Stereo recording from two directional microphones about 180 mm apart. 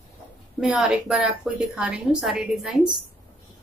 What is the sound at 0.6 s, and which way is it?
A woman's voice, 5° right (ahead or behind).